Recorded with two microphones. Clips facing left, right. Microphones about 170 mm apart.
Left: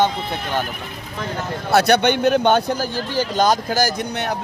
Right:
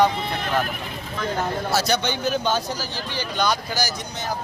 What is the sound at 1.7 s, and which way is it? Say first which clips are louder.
Speech: left 10 dB; 60° left (ahead or behind).